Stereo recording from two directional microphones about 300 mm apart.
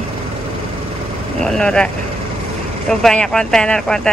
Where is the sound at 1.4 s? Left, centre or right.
Centre.